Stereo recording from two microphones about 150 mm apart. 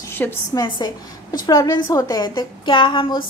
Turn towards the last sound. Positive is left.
turn(degrees=35)  # may be behind; listen again after turning